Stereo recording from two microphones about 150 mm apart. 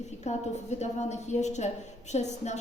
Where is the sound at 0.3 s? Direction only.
50° left (ahead or behind).